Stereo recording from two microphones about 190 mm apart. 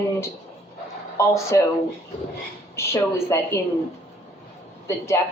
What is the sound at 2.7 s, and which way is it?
Speech, 15° left (ahead or behind).